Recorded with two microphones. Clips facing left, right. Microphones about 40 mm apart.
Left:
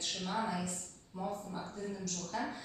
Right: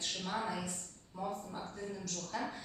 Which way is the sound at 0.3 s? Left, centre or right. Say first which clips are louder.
Left 2 dB; centre.